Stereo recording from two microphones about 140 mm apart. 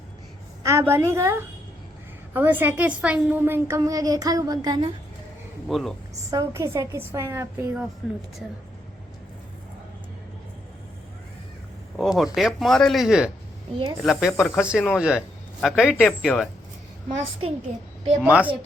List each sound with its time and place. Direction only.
0.6 s a woman's voice: 20° right (ahead or behind)
5.6 s speech: centre (ahead or behind)
6.3 s a woman's voice: 20° right (ahead or behind)
8.0 s speech: 5° right (ahead or behind)
11.9 s speech: centre (ahead or behind)
18.2 s speech: 10° right (ahead or behind)